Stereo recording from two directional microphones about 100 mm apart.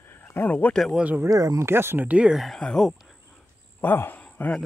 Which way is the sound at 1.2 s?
35° right (ahead or behind).